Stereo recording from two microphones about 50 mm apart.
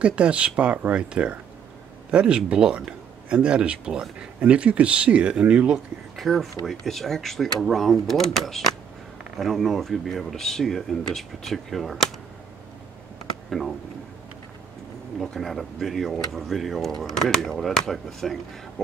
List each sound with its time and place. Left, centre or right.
0.0 s speech: right
6.1 s speech: centre
13.5 s speech: centre
15.1 s speech: centre